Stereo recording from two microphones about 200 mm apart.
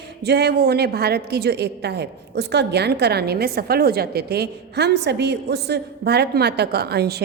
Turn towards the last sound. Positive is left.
turn(degrees=-55)  # may be behind; listen again after turning